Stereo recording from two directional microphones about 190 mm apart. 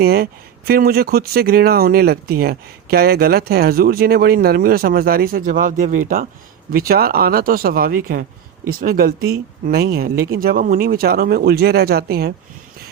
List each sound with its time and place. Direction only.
0.0 s speech: 55° right (ahead or behind)